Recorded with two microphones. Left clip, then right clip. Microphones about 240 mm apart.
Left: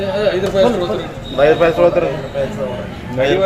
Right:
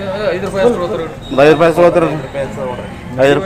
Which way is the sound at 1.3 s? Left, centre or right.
Right.